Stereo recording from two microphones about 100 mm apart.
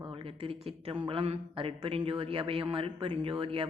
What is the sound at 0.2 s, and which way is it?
Speech, 70° right (ahead or behind).